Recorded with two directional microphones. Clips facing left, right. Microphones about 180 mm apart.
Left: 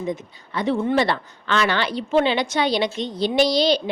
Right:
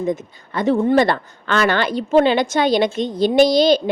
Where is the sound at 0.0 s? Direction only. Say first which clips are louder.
Right 5 dB; 50° right (ahead or behind).